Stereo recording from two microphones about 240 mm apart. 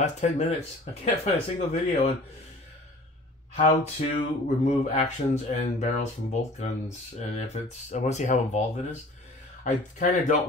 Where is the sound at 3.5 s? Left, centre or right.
Left.